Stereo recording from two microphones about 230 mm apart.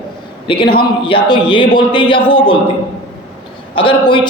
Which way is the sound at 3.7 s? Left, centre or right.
Left.